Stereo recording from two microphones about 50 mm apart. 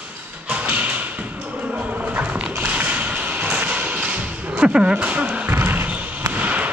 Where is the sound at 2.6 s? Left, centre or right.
Right.